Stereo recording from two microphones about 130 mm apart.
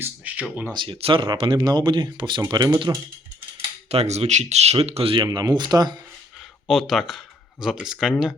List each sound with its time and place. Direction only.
0.0 s speech: 10° right (ahead or behind)
0.7 s speech: 40° right (ahead or behind)
3.8 s speech: 55° right (ahead or behind); by 6.0 s 35° right (ahead or behind)
6.7 s speech: centre (ahead or behind)